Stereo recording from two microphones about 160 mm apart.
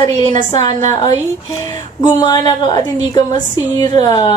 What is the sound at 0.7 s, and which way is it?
Speech, 50° right (ahead or behind).